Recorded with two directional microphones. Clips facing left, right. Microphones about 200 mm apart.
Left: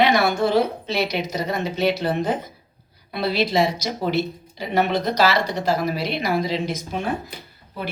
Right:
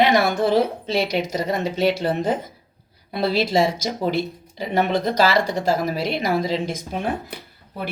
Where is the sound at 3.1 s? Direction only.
45° right (ahead or behind).